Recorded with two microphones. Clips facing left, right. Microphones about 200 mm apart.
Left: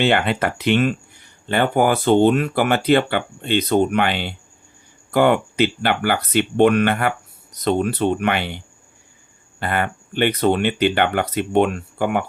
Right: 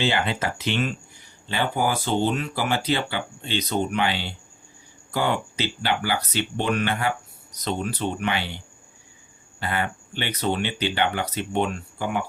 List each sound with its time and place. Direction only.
0.0 s speech: 60° left (ahead or behind)